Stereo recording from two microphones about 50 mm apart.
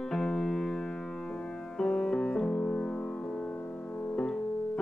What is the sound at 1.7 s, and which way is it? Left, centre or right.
Music, centre.